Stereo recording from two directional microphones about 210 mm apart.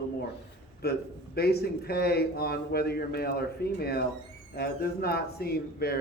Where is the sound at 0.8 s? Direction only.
50° left (ahead or behind).